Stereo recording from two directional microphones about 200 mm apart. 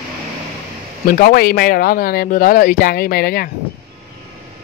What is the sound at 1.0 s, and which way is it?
Speech, 45° left (ahead or behind).